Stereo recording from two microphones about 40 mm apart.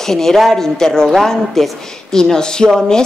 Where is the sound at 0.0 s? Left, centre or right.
Centre.